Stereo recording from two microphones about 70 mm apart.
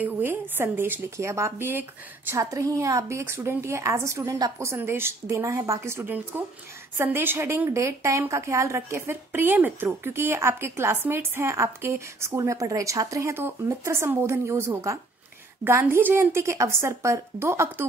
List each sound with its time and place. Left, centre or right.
0.0 s a woman's voice: right
1.1 s a woman's voice: right
1.7 s a woman's voice: right
2.3 s a woman's voice: right
5.4 s a woman's voice: right